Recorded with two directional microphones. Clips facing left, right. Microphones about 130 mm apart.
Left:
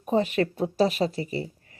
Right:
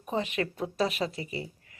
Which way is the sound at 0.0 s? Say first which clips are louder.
Left 7 dB; 40° left (ahead or behind).